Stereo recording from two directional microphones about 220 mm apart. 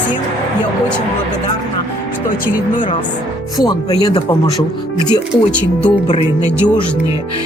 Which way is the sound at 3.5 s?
15° left (ahead or behind).